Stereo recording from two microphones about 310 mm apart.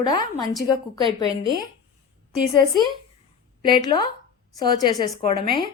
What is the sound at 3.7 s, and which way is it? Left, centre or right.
Speech, centre.